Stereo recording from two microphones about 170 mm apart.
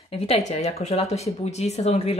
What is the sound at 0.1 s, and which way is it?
Speech, 40° left (ahead or behind).